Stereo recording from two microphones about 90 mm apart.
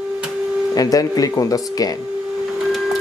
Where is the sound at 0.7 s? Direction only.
45° left (ahead or behind).